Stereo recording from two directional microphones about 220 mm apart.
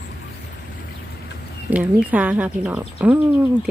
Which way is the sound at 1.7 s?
5° right (ahead or behind).